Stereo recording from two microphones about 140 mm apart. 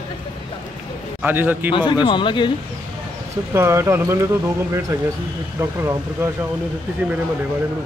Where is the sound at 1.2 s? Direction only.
15° right (ahead or behind).